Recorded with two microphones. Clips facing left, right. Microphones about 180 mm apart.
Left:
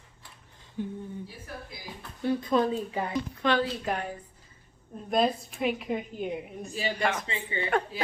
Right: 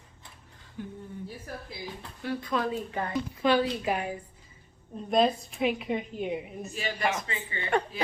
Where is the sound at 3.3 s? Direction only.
10° right (ahead or behind).